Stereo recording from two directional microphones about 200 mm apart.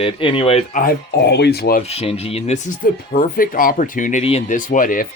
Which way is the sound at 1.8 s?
30° left (ahead or behind).